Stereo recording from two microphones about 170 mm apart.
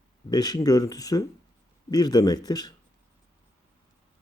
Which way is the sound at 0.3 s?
25° left (ahead or behind).